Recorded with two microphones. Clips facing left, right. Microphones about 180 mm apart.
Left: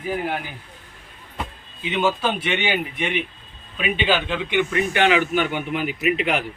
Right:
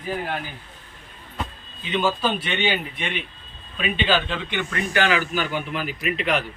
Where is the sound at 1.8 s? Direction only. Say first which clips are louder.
Left 1 dB; 20° left (ahead or behind).